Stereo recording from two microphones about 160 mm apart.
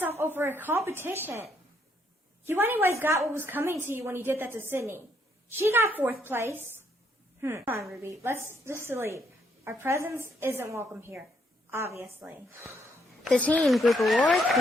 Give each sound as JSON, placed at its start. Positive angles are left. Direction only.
{"t": 0.2, "sound": "a woman's voice", "side_deg": -15}
{"t": 2.5, "sound": "a woman's voice", "side_deg": -15}
{"t": 13.2, "sound": "a woman's voice", "side_deg": 5}